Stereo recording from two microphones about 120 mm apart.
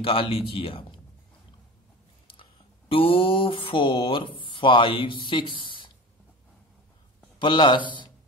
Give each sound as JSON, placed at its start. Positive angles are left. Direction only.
{"t": 0.0, "sound": "speech", "side_deg": 45}
{"t": 2.9, "sound": "speech", "side_deg": 50}
{"t": 7.3, "sound": "a man's voice", "side_deg": 40}